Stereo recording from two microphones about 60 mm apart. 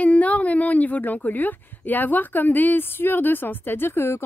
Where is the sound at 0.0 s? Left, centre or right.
Left.